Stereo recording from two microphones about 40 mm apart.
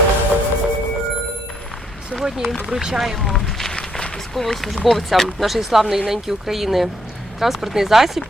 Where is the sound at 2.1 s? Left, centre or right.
Centre.